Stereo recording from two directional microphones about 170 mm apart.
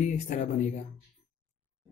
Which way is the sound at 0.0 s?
45° left (ahead or behind).